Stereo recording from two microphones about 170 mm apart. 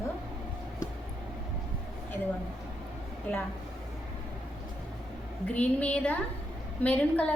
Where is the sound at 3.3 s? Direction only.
10° left (ahead or behind).